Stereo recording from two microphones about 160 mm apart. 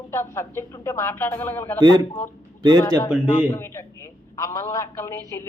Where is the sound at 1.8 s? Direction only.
25° right (ahead or behind).